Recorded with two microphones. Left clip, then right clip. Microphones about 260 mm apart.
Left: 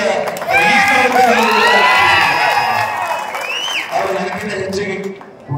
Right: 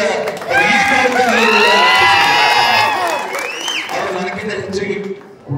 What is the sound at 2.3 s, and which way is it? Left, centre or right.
Music, right.